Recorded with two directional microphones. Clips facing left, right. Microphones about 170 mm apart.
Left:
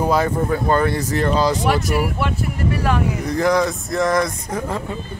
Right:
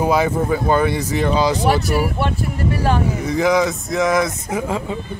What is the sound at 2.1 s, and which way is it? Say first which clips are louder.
Speech: right 1 dB; 30° right (ahead or behind).